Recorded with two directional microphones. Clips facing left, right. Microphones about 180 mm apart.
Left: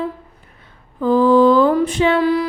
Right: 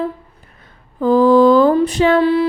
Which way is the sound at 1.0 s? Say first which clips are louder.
Right 2 dB; 40° right (ahead or behind).